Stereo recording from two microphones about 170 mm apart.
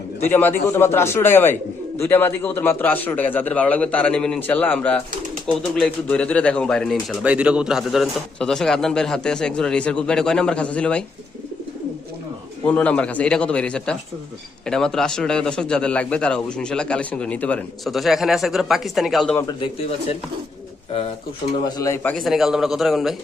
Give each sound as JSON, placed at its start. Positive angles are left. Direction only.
{"t": 0.2, "sound": "a man's voice", "side_deg": 10}
{"t": 12.6, "sound": "a man's voice", "side_deg": 10}
{"t": 21.6, "sound": "speech", "side_deg": 20}
{"t": 22.1, "sound": "speech", "side_deg": 0}